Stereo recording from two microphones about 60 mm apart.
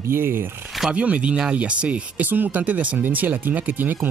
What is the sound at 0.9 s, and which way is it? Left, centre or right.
Speech, right.